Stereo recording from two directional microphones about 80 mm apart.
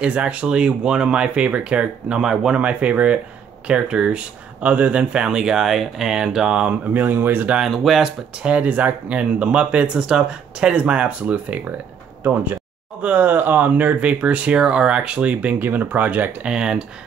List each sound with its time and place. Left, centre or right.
0.0 s speech: centre
6.9 s speech: right
7.5 s speech: centre
8.4 s speech: centre
13.0 s speech: right